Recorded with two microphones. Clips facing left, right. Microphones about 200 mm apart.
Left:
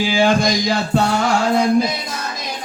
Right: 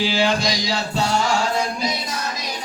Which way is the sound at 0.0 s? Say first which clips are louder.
Left 4 dB; 50° left (ahead or behind).